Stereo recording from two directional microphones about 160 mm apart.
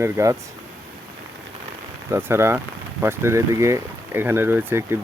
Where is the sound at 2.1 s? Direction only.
15° right (ahead or behind).